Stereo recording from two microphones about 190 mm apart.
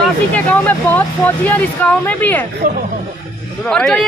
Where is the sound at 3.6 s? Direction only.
5° left (ahead or behind).